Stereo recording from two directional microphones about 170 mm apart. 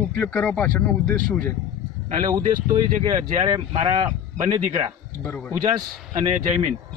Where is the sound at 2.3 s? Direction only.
25° right (ahead or behind).